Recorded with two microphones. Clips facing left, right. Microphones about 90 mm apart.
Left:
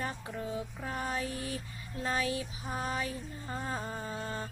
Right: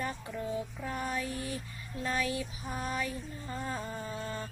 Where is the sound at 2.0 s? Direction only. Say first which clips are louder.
Even; 25° left (ahead or behind).